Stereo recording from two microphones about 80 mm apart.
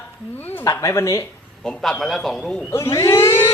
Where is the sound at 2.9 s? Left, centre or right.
Left.